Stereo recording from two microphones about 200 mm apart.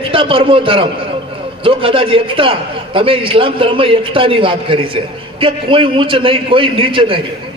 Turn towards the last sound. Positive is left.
turn(degrees=-25)  # may be behind; listen again after turning